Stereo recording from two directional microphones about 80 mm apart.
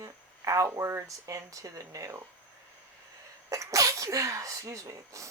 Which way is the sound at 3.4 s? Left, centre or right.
Right.